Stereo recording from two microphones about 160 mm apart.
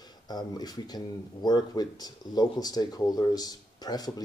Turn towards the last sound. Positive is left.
turn(degrees=25)  # may be behind; listen again after turning